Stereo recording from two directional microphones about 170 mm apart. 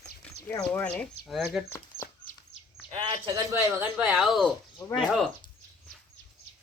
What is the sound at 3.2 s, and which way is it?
Speech, 20° right (ahead or behind).